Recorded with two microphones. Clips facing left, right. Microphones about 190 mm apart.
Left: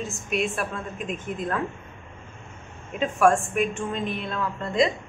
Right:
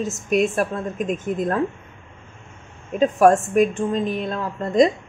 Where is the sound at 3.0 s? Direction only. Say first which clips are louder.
Right 5 dB; 40° right (ahead or behind).